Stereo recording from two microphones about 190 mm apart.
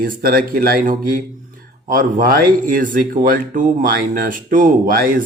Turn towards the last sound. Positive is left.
turn(degrees=-45)  # may be behind; listen again after turning